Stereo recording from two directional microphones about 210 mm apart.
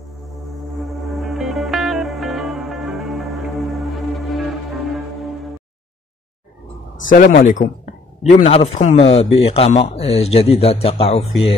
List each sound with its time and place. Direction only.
0.7 s music: centre (ahead or behind)
7.1 s a man's voice: 40° left (ahead or behind)